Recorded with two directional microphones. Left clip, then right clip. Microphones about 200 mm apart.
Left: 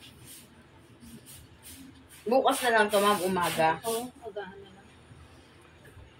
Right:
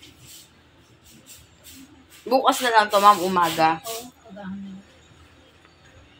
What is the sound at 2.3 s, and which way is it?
Speech, 40° right (ahead or behind).